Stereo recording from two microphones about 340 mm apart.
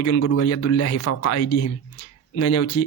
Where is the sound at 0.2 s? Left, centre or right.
Left.